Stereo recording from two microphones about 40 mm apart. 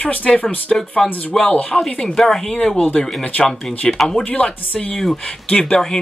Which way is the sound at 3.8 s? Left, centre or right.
Centre.